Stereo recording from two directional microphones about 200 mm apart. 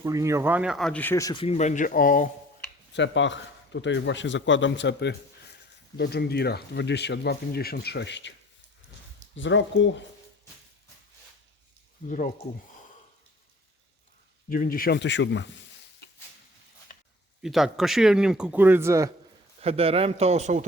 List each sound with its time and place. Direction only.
0.0 s speech: 15° right (ahead or behind); by 2.3 s 45° left (ahead or behind)
2.9 s a man's voice: 65° left (ahead or behind)
9.3 s speech: 70° left (ahead or behind)
12.0 s speech: 40° left (ahead or behind)
14.5 s speech: 45° left (ahead or behind); by 15.4 s 65° left (ahead or behind)
17.4 s speech: centre (ahead or behind)
19.6 s a man's voice: 30° right (ahead or behind)